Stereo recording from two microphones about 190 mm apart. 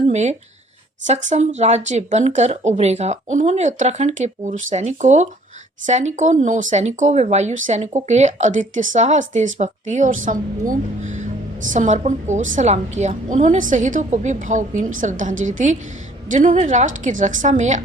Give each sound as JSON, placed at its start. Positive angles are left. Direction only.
{"t": 0.1, "sound": "a woman's voice", "side_deg": -35}